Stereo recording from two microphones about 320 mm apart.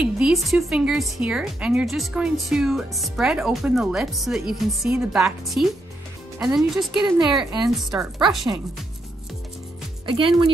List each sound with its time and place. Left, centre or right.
0.0 s speech: centre
10.0 s speech: centre